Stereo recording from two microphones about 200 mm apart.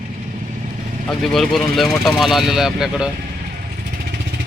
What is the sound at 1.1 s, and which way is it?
Speech, centre (ahead or behind).